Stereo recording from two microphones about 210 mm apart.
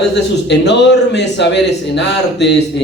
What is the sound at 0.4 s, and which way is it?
A man's voice, 55° left (ahead or behind).